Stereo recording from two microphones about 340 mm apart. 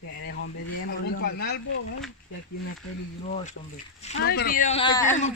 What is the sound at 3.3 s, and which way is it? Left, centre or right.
A man's voice, left.